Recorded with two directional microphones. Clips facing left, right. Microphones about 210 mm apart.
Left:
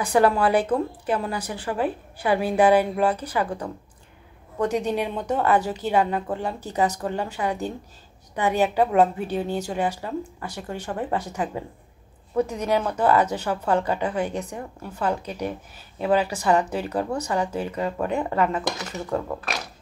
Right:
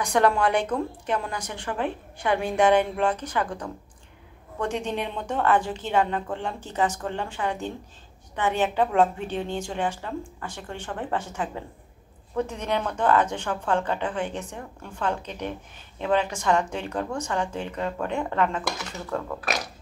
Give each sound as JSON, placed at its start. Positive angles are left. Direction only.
{"t": 0.0, "sound": "a woman's voice", "side_deg": 5}
{"t": 4.8, "sound": "a woman's voice", "side_deg": 10}
{"t": 12.4, "sound": "a woman's voice", "side_deg": 10}
{"t": 18.6, "sound": "a woman's voice", "side_deg": 20}